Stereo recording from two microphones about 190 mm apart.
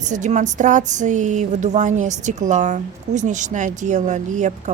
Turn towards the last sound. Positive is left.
turn(degrees=-40)  # may be behind; listen again after turning